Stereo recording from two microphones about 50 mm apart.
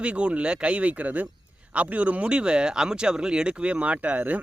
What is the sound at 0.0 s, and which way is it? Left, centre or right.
Speech, right.